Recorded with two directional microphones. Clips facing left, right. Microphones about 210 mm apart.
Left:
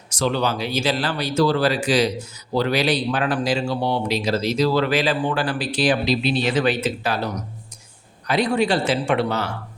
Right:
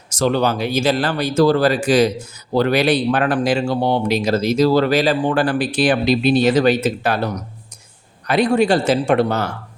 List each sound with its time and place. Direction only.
0.1 s speech: 45° right (ahead or behind)
8.3 s speech: 50° right (ahead or behind)